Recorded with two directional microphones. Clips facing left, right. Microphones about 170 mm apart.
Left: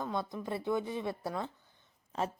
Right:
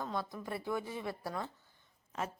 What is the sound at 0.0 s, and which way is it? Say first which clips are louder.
A woman's voice: left 3 dB; 20° left (ahead or behind).